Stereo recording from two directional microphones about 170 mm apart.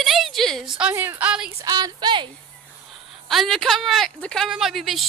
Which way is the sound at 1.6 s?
20° right (ahead or behind).